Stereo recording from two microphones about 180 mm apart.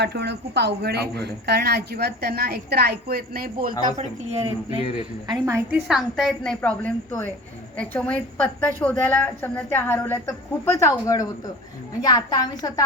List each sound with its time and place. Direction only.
0.0 s a woman's voice: 70° right (ahead or behind); by 3.8 s 55° right (ahead or behind)
3.9 s a woman's voice: 35° right (ahead or behind)
5.3 s a woman's voice: 15° right (ahead or behind)
5.7 s a woman's voice: centre (ahead or behind); by 12.8 s 20° left (ahead or behind)